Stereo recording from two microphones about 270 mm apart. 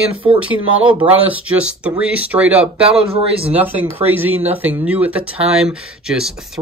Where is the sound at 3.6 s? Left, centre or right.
Centre.